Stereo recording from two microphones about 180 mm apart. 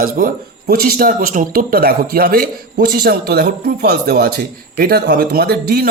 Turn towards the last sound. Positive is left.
turn(degrees=-60)  # may be behind; listen again after turning